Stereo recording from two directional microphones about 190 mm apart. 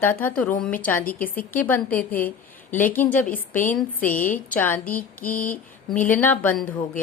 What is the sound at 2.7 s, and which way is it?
A woman's voice, 10° left (ahead or behind).